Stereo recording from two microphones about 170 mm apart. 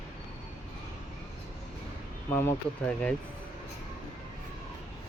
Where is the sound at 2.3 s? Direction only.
15° left (ahead or behind).